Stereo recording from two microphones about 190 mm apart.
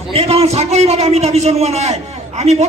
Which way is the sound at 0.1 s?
30° right (ahead or behind).